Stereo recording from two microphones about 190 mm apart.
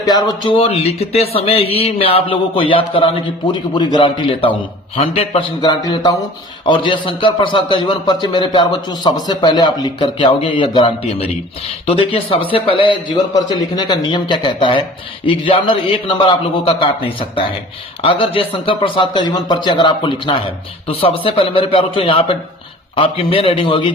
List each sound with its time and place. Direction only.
0.0 s a man's voice: 20° left (ahead or behind)
18.0 s a man's voice: 30° left (ahead or behind)